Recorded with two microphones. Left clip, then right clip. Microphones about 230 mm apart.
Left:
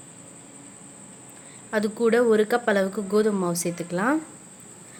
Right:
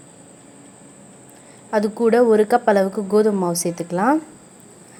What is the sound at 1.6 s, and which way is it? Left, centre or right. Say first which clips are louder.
A woman's voice: right 5 dB; centre.